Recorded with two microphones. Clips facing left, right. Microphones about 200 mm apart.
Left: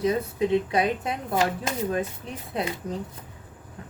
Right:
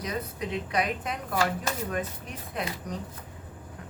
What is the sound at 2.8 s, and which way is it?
Speech, 25° left (ahead or behind).